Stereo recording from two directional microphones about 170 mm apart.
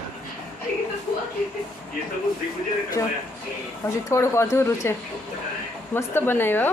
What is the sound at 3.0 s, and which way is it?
A woman's voice, 20° left (ahead or behind).